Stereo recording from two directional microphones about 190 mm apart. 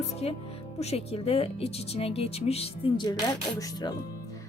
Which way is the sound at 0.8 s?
35° left (ahead or behind).